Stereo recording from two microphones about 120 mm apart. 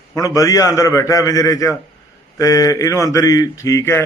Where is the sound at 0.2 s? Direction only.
30° left (ahead or behind).